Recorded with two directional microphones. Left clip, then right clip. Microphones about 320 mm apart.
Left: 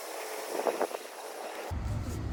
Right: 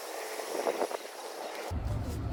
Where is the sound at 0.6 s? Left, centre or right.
Centre.